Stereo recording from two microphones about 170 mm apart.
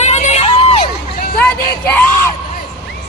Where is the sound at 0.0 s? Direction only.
40° left (ahead or behind).